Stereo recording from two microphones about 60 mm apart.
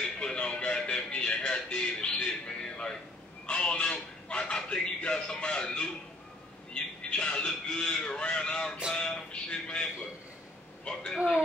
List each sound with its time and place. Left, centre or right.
0.2 s music: centre
3.4 s a sound: centre
6.7 s a man's voice: centre
8.9 s a sound: centre
10.9 s a woman's voice: centre
11.1 s speech: centre